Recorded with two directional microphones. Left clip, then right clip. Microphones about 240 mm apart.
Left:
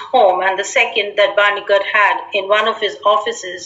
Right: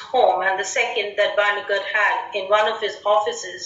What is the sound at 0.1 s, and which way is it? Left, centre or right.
A woman's voice, left.